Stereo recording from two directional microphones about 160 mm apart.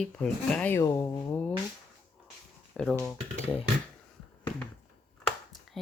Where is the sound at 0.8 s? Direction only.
20° left (ahead or behind).